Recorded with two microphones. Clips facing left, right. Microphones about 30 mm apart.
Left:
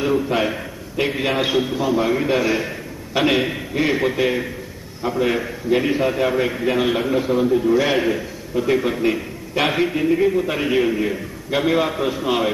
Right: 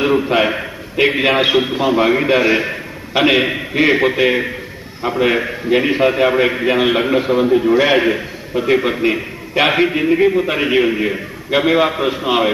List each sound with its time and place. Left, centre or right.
0.0 s a man's voice: right